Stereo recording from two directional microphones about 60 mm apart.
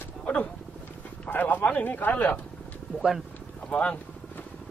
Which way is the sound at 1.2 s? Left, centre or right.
Left.